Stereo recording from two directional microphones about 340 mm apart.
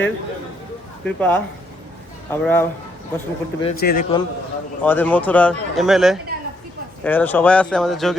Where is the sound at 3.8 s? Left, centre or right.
Left.